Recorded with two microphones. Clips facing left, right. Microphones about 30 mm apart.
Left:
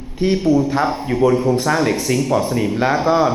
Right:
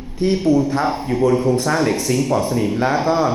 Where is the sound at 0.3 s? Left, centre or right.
Centre.